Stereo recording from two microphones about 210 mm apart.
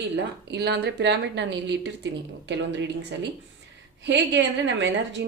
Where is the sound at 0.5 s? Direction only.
55° right (ahead or behind).